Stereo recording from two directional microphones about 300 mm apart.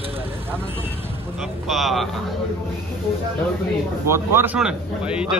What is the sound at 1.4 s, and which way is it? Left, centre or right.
Speech, centre.